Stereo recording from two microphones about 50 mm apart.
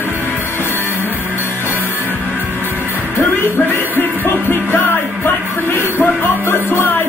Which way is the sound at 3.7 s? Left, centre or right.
Left.